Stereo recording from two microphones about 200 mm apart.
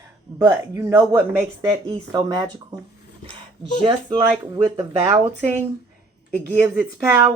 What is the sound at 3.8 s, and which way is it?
Speech, 25° right (ahead or behind).